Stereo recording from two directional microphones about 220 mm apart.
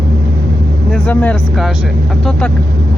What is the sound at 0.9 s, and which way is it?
Speech, 5° left (ahead or behind).